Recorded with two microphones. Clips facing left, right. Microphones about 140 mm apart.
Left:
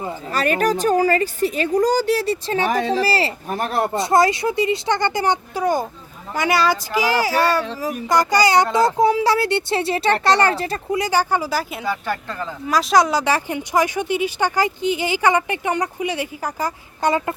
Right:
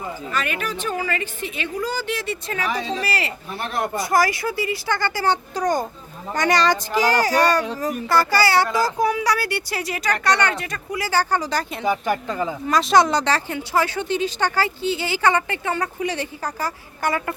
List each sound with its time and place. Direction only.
0.0 s a woman's voice: 35° left (ahead or behind)
2.6 s speech: 55° left (ahead or behind)
3.0 s a woman's voice: 30° left (ahead or behind)
3.9 s speech: 25° left (ahead or behind); by 8.0 s 5° left (ahead or behind)
8.0 s speech: 15° left (ahead or behind)
11.9 s speech: 15° right (ahead or behind)
12.6 s speech: centre (ahead or behind); by 17.3 s 20° left (ahead or behind)